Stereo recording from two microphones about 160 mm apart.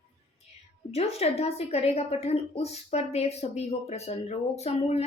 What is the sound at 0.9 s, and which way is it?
A woman's voice, 40° left (ahead or behind).